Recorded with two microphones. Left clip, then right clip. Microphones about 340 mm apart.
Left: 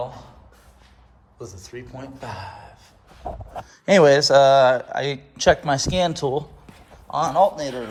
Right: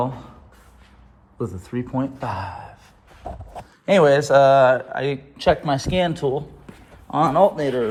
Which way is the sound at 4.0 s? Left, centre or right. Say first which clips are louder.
Left 1 dB; left.